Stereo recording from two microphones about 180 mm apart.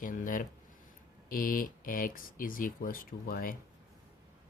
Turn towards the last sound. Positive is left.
turn(degrees=55)  # may be behind; listen again after turning